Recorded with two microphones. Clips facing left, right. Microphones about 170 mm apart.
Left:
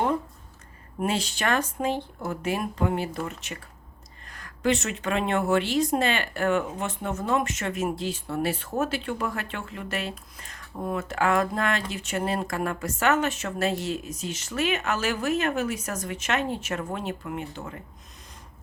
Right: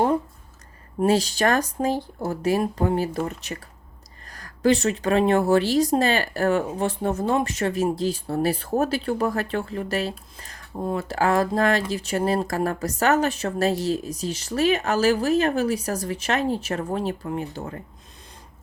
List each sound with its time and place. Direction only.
0.9 s speech: 35° right (ahead or behind)